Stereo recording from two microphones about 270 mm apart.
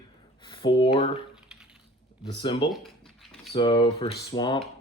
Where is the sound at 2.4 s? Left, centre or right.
Centre.